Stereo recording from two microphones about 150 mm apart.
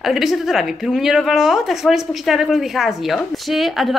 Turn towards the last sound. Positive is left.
turn(degrees=0)  # may be behind; listen again after turning